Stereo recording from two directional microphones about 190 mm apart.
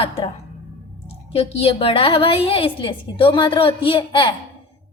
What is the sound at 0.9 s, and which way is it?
A woman's voice, 30° left (ahead or behind).